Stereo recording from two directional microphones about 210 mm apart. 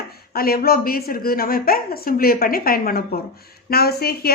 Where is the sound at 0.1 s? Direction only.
45° left (ahead or behind).